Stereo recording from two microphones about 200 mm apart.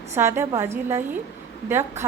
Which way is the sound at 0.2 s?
15° right (ahead or behind).